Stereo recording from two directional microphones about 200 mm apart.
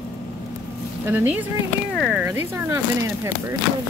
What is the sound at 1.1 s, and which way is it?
Speech, 10° right (ahead or behind).